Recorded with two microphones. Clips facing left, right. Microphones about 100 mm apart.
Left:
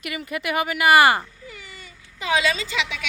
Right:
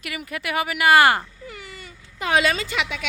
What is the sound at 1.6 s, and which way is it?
Baby cry, 50° right (ahead or behind).